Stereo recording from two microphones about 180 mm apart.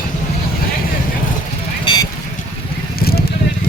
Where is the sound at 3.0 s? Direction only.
60° left (ahead or behind).